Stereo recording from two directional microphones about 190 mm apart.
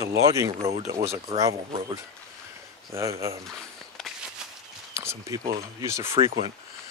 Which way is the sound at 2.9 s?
15° right (ahead or behind).